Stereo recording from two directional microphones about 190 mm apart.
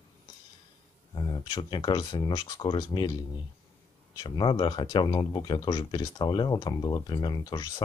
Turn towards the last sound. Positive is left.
turn(degrees=20)  # may be behind; listen again after turning